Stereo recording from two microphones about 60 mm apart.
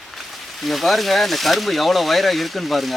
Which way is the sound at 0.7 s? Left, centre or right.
Centre.